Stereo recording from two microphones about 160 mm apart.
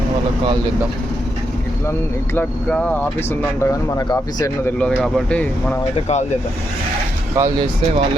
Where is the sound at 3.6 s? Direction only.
20° left (ahead or behind).